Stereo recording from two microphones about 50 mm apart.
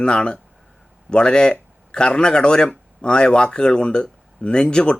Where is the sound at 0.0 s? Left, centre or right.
Centre.